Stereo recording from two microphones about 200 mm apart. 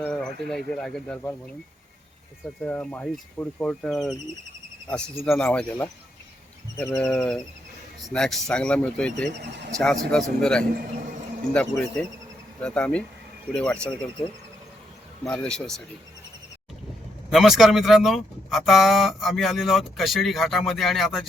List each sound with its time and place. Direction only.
0.0 s speech: 5° left (ahead or behind)
2.6 s speech: 5° left (ahead or behind)
9.5 s speech: 60° right (ahead or behind)
9.7 s speech: centre (ahead or behind)
15.2 s speech: 5° left (ahead or behind)
17.3 s speech: centre (ahead or behind)